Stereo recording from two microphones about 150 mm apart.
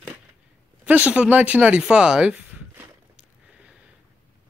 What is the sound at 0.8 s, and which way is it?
Speech, 10° right (ahead or behind).